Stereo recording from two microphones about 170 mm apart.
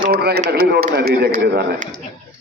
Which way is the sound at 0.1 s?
70° right (ahead or behind).